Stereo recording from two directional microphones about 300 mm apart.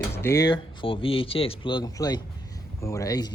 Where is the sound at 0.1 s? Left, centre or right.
Centre.